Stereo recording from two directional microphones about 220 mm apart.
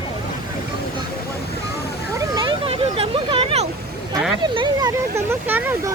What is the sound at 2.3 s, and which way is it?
Vehicle, 20° right (ahead or behind).